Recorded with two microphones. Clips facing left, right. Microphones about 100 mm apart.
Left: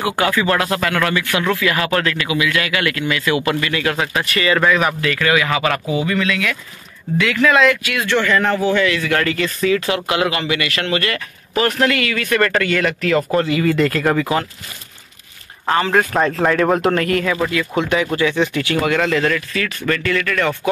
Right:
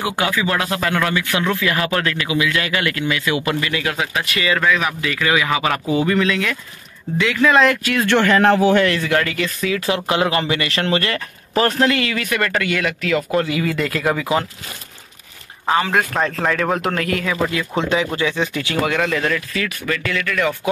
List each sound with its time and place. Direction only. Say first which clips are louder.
0.0 s speech: left 3 dB; 20° right (ahead or behind)
3.9 s speech: left 2 dB; 5° right (ahead or behind)
5.0 s speech: left 2 dB; 15° right (ahead or behind)
5.9 s speech: right 2 dB; 30° right (ahead or behind)
7.6 s speech: even; 40° right (ahead or behind)
8.1 s a man's voice: right 3 dB; 60° right (ahead or behind)
8.7 s speech: right 1 dB; 45° right (ahead or behind)
9.2 s speech: left 3 dB; 5° right (ahead or behind)
9.8 s speech: even; 20° right (ahead or behind)
12.4 s speech: left 5 dB; 10° right (ahead or behind)
15.6 s speech: left 2 dB; 5° right (ahead or behind)
16.1 s speech: left 3 dB; 5° left (ahead or behind)
18.0 s speech: left 3 dB; 15° right (ahead or behind)